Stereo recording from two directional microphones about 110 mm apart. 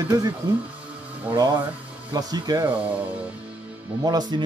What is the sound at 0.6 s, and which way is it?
Music, 15° right (ahead or behind).